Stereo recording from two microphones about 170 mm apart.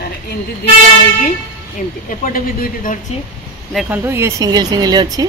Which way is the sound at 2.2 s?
55° left (ahead or behind).